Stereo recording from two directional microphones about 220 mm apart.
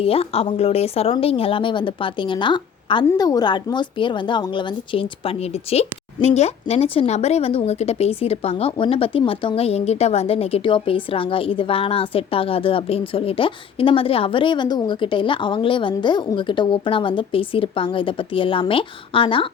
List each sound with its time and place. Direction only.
0.0 s speech: 25° left (ahead or behind)